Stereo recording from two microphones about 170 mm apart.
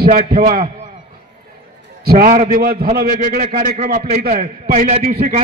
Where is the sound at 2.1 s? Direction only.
60° right (ahead or behind).